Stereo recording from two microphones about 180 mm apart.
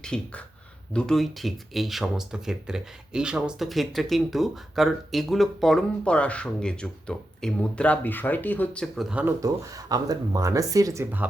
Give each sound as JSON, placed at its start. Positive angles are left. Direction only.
{"t": 0.0, "sound": "speech", "side_deg": 5}
{"t": 9.4, "sound": "speech", "side_deg": -20}